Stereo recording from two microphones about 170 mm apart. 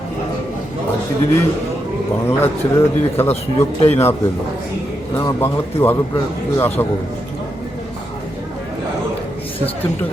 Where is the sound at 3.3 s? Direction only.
35° left (ahead or behind).